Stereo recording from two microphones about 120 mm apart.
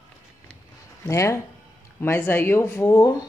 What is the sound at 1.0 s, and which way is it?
Speech, 25° left (ahead or behind).